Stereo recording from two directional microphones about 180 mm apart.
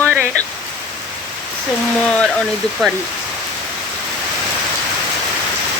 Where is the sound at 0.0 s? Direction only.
5° left (ahead or behind).